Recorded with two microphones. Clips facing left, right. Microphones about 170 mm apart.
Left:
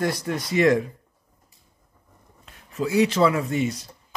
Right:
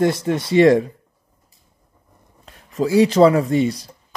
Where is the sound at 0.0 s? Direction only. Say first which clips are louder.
Right 7 dB; 25° right (ahead or behind).